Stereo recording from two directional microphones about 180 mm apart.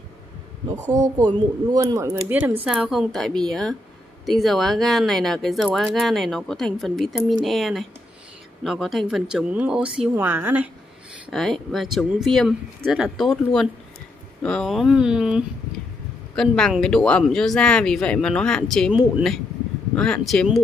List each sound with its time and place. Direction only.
1.2 s speech: 20° right (ahead or behind)
11.2 s speech: centre (ahead or behind)